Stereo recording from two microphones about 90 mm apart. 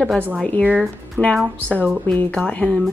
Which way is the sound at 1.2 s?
15° left (ahead or behind).